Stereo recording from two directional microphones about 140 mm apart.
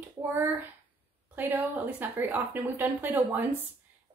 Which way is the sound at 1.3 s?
15° right (ahead or behind).